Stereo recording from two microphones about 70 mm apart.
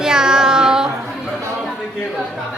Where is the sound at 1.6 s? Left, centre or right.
Centre.